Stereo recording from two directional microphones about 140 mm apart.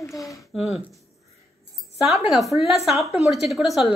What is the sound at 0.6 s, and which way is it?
Speech, 50° left (ahead or behind).